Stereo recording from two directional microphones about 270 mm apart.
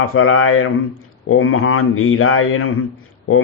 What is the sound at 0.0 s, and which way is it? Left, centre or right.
Speech, left.